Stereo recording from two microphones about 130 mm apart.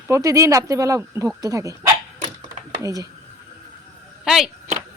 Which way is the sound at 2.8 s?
25° right (ahead or behind).